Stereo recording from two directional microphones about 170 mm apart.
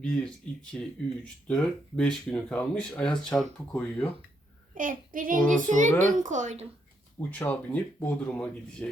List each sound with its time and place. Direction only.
0.0 s speech: 5° left (ahead or behind)
4.7 s a child's voice: 50° right (ahead or behind)
7.2 s speech: 10° left (ahead or behind)